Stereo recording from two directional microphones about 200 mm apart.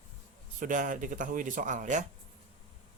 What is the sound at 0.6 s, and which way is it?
Speech, 40° right (ahead or behind).